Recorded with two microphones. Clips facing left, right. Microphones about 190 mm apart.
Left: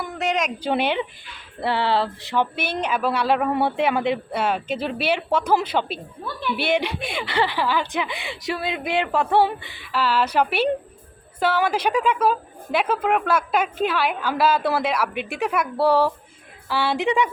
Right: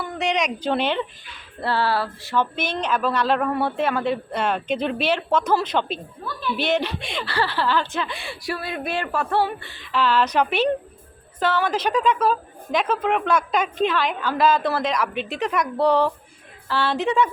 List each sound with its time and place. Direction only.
0.0 s speech: 5° left (ahead or behind)
0.7 s a woman's voice: 10° left (ahead or behind)